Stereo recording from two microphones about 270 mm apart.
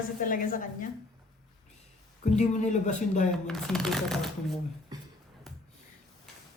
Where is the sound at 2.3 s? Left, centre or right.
Left.